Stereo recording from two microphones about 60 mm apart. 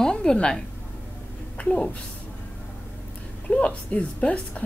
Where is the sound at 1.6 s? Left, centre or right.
Centre.